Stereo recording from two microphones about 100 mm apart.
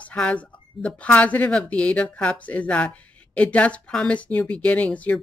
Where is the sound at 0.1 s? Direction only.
10° left (ahead or behind).